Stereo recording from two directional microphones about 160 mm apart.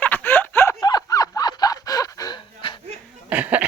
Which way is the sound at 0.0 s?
10° left (ahead or behind).